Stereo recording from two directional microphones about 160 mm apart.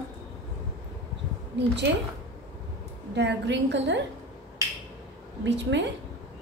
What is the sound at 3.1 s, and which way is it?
Speech, 90° right.